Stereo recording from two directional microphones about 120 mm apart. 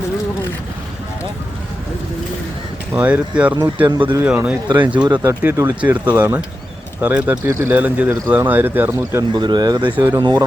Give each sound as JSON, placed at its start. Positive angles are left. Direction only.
{"t": 2.9, "sound": "speech", "side_deg": -10}
{"t": 3.8, "sound": "speech", "side_deg": -35}
{"t": 4.2, "sound": "speech", "side_deg": -10}
{"t": 9.3, "sound": "speech", "side_deg": -40}